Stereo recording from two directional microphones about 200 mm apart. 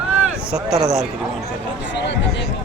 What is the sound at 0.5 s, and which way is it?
Speech, 5° right (ahead or behind).